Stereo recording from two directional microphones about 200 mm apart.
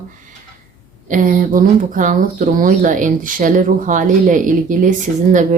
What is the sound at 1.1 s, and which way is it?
Speech, 45° right (ahead or behind).